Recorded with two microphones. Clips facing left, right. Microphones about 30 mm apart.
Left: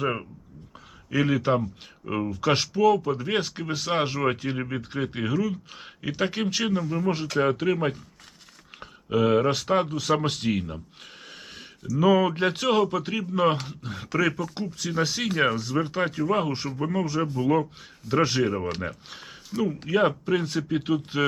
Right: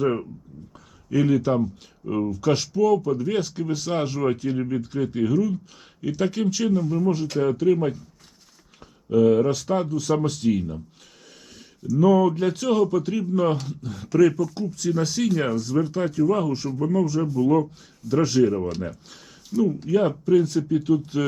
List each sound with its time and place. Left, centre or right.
0.0 s speech: left
11.9 s speech: left